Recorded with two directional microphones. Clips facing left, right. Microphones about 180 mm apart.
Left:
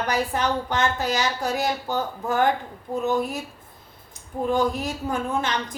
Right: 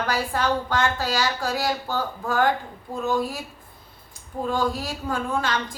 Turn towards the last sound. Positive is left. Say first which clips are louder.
# even
turn(degrees=20)  # may be behind; listen again after turning